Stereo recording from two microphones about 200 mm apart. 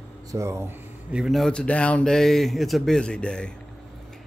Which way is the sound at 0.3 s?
15° right (ahead or behind).